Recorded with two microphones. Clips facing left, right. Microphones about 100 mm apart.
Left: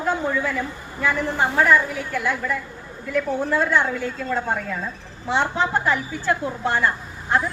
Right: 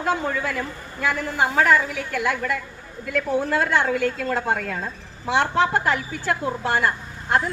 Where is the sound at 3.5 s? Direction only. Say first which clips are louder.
Left 1 dB; 75° right (ahead or behind).